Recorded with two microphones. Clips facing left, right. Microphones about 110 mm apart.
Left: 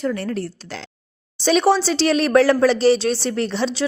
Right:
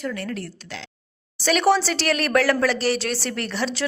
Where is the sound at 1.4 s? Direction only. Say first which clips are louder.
Left 3 dB; 20° left (ahead or behind).